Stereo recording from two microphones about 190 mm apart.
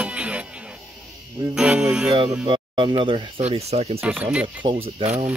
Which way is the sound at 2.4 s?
25° right (ahead or behind).